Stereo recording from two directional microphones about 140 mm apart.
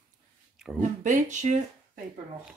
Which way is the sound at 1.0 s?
60° right (ahead or behind).